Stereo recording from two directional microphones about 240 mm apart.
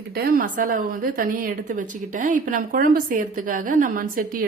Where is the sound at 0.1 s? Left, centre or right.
Right.